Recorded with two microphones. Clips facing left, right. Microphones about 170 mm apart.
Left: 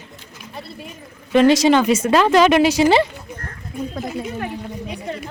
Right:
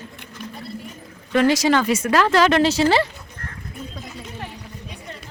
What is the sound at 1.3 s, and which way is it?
Speech, 20° left (ahead or behind).